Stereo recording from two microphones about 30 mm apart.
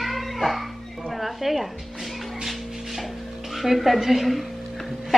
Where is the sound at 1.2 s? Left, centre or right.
Centre.